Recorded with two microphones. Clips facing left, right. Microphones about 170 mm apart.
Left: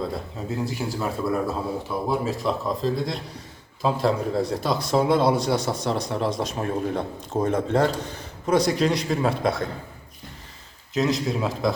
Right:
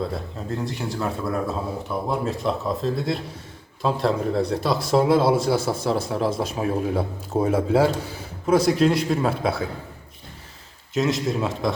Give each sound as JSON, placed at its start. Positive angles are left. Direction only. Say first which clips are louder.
{"t": 0.1, "sound": "speech", "louder": "even", "side_deg": 0}
{"t": 10.9, "sound": "speech", "louder": "right 1 dB", "side_deg": 0}